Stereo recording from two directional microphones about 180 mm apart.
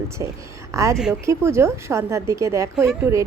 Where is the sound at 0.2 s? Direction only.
15° right (ahead or behind).